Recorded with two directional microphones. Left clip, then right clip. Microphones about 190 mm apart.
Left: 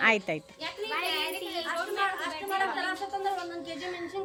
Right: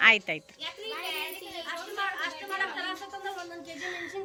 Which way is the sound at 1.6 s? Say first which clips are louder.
Left 3 dB; 25° left (ahead or behind).